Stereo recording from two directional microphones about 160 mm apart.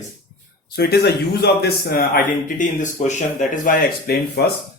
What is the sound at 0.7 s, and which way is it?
A man's voice, 80° left.